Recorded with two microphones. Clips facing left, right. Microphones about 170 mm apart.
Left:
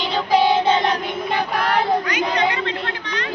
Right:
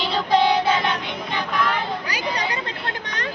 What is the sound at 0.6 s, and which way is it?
Child singing, 35° left (ahead or behind).